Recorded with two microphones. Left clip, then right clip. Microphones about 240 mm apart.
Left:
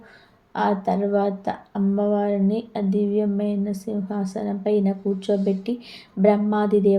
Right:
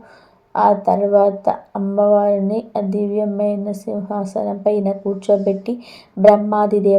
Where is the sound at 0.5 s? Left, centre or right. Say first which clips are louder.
Right 8 dB; right.